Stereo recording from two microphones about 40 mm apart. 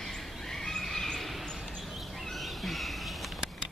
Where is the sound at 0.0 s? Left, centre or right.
Centre.